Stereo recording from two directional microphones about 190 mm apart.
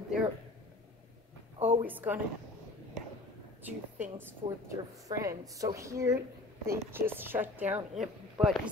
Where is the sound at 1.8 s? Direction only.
10° right (ahead or behind).